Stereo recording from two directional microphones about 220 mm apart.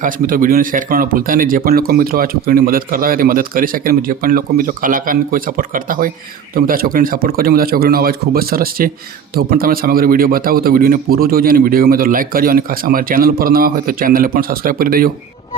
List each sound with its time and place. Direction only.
0.0 s speech: 40° right (ahead or behind)